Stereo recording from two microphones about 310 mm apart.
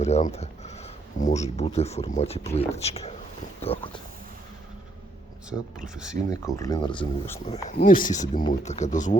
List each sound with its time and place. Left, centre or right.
0.0 s speech: left
5.5 s speech: centre
6.4 s speech: centre